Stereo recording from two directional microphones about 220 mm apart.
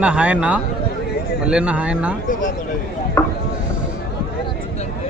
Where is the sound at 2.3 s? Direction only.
35° left (ahead or behind).